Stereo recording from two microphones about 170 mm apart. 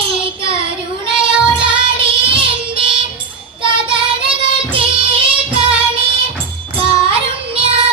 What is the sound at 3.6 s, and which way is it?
Music, 30° right (ahead or behind).